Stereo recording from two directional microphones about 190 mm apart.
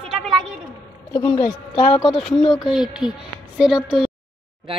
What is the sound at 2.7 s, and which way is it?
A woman's voice, 5° right (ahead or behind).